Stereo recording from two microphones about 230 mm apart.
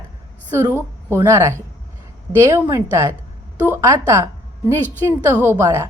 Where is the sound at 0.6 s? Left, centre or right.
Centre.